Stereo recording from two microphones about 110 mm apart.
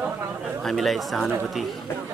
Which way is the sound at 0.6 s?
Centre (ahead or behind).